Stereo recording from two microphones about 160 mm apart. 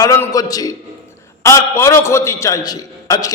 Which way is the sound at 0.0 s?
20° left (ahead or behind).